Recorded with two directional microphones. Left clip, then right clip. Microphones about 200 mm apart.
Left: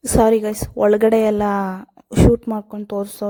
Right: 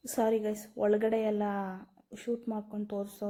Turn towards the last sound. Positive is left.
turn(degrees=45)  # may be behind; listen again after turning